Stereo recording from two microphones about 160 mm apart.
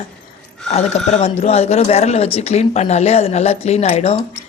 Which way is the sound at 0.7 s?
40° left (ahead or behind).